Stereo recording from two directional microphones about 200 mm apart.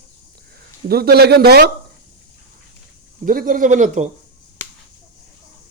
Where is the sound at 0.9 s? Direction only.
50° right (ahead or behind).